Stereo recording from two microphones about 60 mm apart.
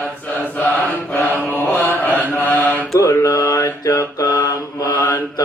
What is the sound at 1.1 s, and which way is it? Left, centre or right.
Mantra, left.